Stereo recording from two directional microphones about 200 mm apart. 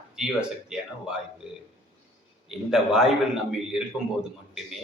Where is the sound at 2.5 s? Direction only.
Centre (ahead or behind).